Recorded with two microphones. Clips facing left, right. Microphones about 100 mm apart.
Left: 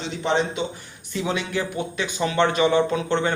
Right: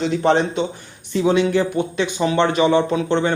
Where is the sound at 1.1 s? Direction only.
25° right (ahead or behind).